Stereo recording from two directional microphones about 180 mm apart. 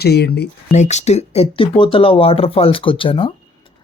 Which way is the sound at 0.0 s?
65° left (ahead or behind).